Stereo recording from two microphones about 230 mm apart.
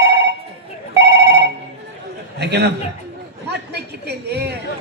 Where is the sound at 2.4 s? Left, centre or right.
Right.